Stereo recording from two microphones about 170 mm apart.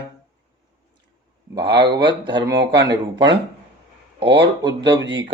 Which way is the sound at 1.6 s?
90° right.